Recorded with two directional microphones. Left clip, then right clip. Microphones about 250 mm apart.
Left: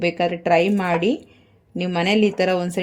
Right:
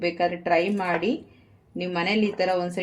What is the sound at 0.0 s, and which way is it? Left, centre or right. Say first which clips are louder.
Speech: left 4 dB; left.